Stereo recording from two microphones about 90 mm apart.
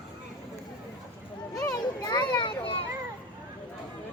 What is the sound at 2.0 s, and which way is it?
Children playing, 55° left (ahead or behind).